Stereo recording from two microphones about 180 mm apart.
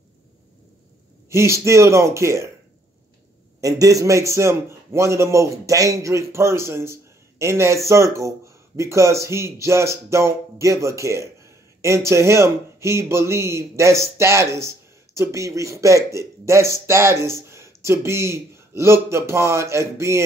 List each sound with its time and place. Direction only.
1.3 s a man's voice: 15° right (ahead or behind)
3.6 s a man's voice: 20° right (ahead or behind)